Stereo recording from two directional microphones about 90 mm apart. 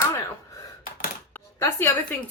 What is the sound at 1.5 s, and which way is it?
Speech, 30° left (ahead or behind).